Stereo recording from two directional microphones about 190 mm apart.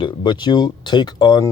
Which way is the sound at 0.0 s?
25° left (ahead or behind).